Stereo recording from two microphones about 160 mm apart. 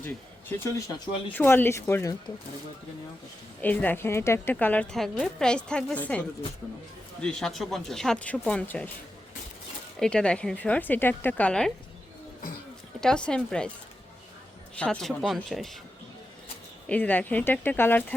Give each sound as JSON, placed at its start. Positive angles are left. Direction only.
{"t": 0.4, "sound": "speech", "side_deg": 20}
{"t": 1.3, "sound": "a woman's voice", "side_deg": 10}
{"t": 3.6, "sound": "a woman's voice", "side_deg": 10}
{"t": 10.0, "sound": "a woman's voice", "side_deg": 5}
{"t": 13.0, "sound": "a woman's voice", "side_deg": 5}
{"t": 14.8, "sound": "a woman's voice", "side_deg": 5}
{"t": 16.8, "sound": "a woman's voice", "side_deg": 10}